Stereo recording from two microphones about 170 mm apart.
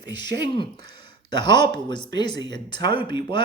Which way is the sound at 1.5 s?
25° left (ahead or behind).